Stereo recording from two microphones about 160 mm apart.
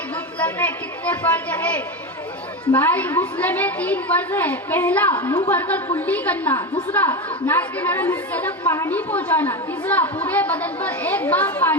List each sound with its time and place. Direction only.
0.3 s a woman's voice: 10° left (ahead or behind)